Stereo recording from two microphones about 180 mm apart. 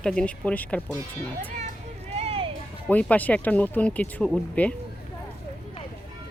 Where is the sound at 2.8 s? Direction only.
10° left (ahead or behind).